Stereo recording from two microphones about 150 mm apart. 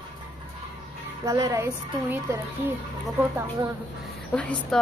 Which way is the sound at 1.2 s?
20° right (ahead or behind).